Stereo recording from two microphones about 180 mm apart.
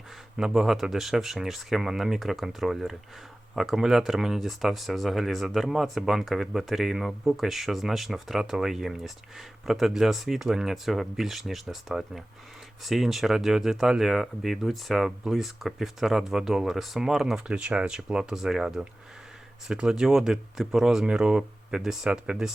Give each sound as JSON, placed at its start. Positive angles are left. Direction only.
{"t": 0.3, "sound": "speech", "side_deg": -5}